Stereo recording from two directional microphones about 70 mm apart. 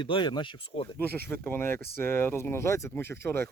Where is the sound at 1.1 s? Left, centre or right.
Left.